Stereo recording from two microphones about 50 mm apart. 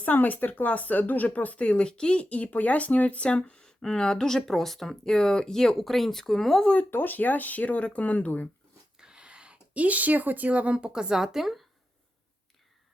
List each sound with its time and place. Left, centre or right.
0.0 s speech: left; by 6.7 s centre
6.7 s speech: left
9.0 s speech: centre